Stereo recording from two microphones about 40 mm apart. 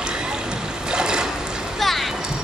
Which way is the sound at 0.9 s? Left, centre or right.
Centre.